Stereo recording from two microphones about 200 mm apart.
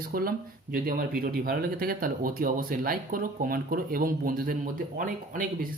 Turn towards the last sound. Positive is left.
turn(degrees=-45)  # may be behind; listen again after turning